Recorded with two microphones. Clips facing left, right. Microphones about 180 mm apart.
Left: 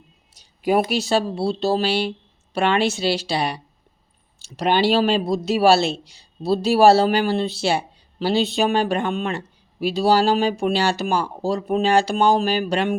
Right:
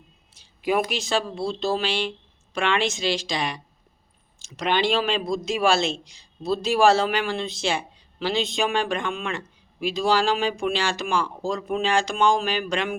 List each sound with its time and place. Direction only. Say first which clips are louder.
0.3 s a sound: left 4 dB; 40° left (ahead or behind)
0.9 s a man's voice: left 5 dB; 40° left (ahead or behind)
4.6 s a man's voice: left 5 dB; 40° left (ahead or behind)